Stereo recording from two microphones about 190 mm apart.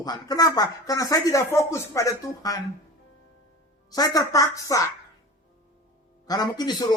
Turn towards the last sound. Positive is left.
turn(degrees=20)  # may be behind; listen again after turning